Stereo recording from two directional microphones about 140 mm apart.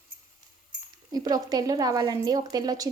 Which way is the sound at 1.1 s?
25° right (ahead or behind).